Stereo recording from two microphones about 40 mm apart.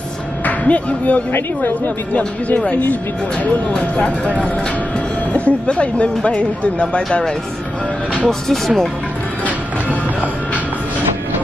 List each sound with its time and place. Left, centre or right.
0.5 s speech: left
3.9 s speech: left
8.3 s speech: centre